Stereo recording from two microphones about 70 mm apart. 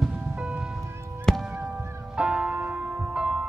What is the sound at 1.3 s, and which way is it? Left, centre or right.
Music, centre.